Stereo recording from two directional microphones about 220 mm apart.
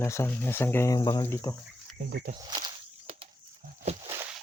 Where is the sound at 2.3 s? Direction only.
20° right (ahead or behind).